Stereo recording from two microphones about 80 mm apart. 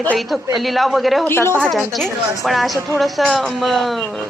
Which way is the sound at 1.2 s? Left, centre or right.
Left.